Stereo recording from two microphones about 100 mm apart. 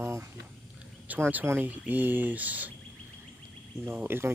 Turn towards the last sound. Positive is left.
turn(degrees=-25)  # may be behind; listen again after turning